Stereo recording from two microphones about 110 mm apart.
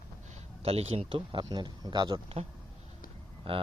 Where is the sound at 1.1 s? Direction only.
45° right (ahead or behind).